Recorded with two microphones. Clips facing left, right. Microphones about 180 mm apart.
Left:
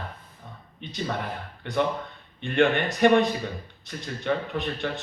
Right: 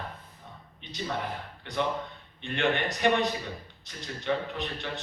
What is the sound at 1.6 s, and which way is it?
Speech, 55° left (ahead or behind).